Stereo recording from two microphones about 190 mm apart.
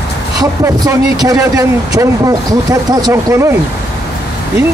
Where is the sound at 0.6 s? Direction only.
20° right (ahead or behind).